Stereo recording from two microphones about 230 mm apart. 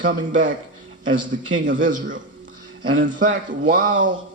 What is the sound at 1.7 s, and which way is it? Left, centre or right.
Speech, right.